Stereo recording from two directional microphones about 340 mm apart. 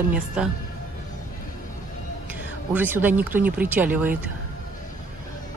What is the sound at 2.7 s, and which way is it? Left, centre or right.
Speech, centre.